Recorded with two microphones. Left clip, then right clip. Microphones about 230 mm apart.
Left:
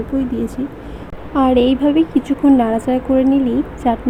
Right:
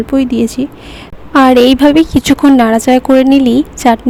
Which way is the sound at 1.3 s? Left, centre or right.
Right.